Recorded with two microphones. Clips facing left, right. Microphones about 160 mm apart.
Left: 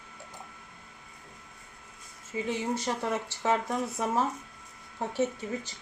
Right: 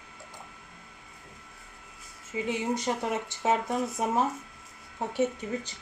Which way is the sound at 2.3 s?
15° right (ahead or behind).